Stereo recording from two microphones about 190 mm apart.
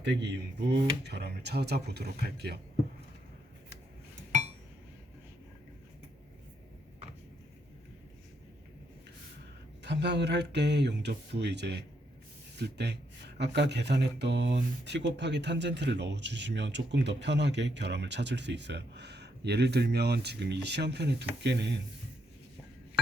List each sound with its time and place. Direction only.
0.0 s speech: 65° right (ahead or behind)
9.8 s speech: 65° right (ahead or behind)